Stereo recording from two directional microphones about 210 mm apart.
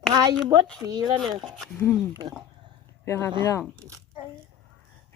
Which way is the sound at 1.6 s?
Centre (ahead or behind).